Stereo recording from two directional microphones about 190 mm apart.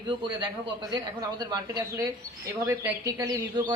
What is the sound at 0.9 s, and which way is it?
A woman's voice, 20° right (ahead or behind).